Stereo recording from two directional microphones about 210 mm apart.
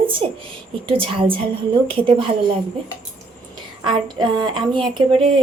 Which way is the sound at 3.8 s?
20° right (ahead or behind).